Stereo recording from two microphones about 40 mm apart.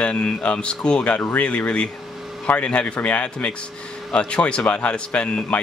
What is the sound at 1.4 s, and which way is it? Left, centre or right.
Speech, left.